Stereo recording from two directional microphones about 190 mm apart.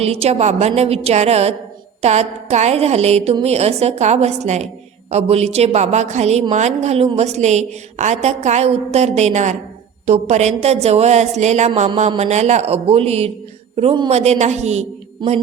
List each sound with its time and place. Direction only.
0.0 s a woman's voice: 35° right (ahead or behind)